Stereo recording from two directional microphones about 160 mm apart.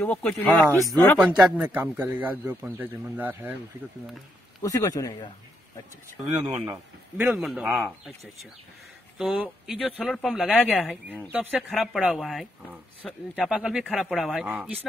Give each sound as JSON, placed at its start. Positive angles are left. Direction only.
{"t": 0.0, "sound": "speech", "side_deg": 10}
{"t": 1.2, "sound": "a man's voice", "side_deg": -5}
{"t": 4.6, "sound": "speech", "side_deg": 20}
{"t": 6.5, "sound": "a man's voice", "side_deg": -15}
{"t": 9.2, "sound": "speech", "side_deg": -5}